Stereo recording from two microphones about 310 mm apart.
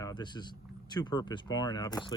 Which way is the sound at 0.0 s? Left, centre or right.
Centre.